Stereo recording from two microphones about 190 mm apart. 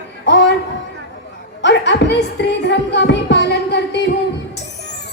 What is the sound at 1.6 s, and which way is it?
Music, 70° left (ahead or behind).